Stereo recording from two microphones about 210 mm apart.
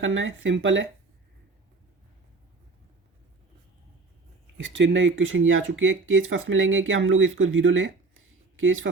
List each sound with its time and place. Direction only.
0.0 s speech: 65° right (ahead or behind)
4.5 s speech: 60° right (ahead or behind)